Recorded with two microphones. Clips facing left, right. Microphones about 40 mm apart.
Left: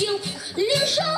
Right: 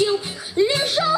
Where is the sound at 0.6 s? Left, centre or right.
Right.